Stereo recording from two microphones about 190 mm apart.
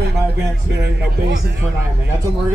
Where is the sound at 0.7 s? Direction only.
60° right (ahead or behind).